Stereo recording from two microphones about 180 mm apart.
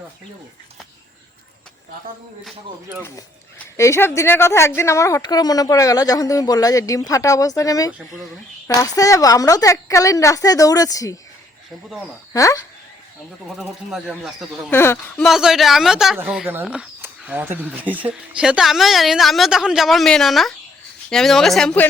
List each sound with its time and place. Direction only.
3.0 s speech: 15° left (ahead or behind)
12.3 s speech: 20° left (ahead or behind)
13.6 s speech: centre (ahead or behind)
14.7 s speech: 15° left (ahead or behind)
15.2 s speech: centre (ahead or behind)